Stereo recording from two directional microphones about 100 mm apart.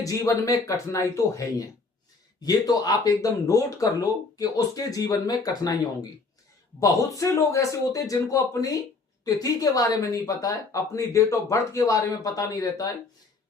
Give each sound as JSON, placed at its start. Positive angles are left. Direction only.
{"t": 0.0, "sound": "speech", "side_deg": 35}